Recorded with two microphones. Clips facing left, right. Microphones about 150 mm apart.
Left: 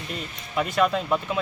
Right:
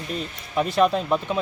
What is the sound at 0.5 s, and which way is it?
Speech, 30° right (ahead or behind).